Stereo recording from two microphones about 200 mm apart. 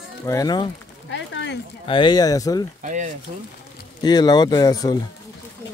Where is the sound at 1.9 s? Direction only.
20° left (ahead or behind).